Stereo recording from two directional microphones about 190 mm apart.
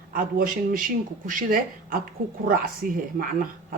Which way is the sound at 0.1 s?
50° right (ahead or behind).